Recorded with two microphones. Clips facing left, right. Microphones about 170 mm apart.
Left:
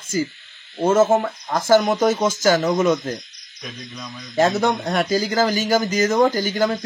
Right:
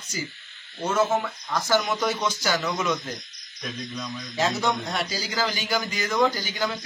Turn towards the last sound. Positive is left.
turn(degrees=45)  # may be behind; listen again after turning